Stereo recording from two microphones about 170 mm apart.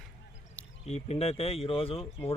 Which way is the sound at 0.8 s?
40° left (ahead or behind).